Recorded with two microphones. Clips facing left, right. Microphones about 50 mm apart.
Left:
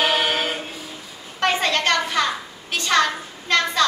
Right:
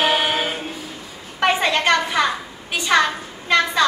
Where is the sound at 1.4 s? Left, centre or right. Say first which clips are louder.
Right 2 dB; centre.